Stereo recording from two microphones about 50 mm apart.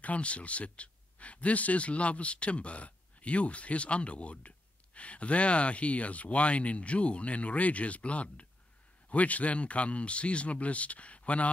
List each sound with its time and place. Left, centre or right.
0.0 s speech: left